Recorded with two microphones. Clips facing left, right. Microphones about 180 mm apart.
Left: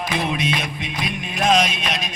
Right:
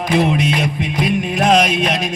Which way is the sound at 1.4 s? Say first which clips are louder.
Right 4 dB; 65° right (ahead or behind).